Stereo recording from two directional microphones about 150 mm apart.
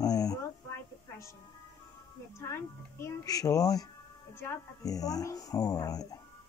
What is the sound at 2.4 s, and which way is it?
Speech, 20° left (ahead or behind).